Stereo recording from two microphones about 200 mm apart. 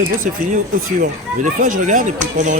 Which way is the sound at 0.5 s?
40° right (ahead or behind).